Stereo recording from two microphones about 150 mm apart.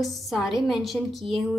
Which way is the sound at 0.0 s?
Centre (ahead or behind).